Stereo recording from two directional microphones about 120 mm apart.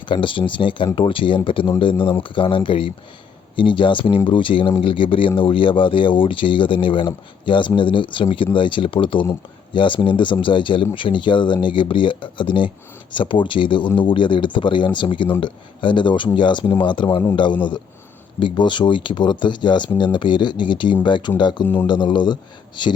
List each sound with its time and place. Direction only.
0.0 s speech: 45° left (ahead or behind)